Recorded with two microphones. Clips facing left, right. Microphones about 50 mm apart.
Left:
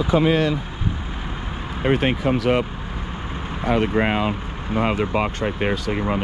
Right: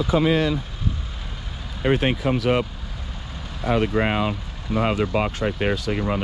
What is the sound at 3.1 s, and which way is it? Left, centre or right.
Vehicle, left.